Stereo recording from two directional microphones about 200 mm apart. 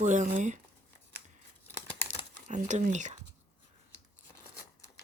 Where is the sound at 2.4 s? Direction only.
35° right (ahead or behind).